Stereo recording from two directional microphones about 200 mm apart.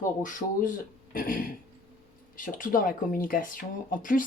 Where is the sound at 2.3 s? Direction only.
40° left (ahead or behind).